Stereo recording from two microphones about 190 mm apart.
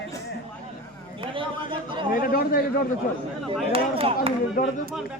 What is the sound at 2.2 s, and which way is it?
Speech, 50° left (ahead or behind).